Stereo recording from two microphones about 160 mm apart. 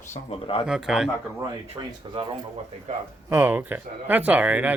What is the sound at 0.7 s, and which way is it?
Speech, 5° right (ahead or behind).